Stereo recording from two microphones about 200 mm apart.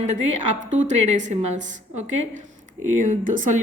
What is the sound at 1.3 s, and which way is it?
A woman's voice, 35° right (ahead or behind).